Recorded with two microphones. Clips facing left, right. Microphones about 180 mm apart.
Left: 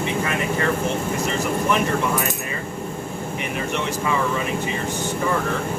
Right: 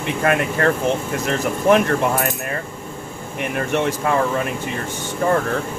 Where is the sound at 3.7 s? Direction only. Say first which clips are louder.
Right 5 dB; 55° right (ahead or behind).